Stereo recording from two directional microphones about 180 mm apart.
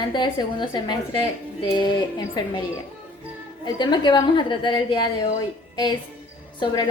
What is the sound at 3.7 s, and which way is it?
A woman's voice, 25° left (ahead or behind).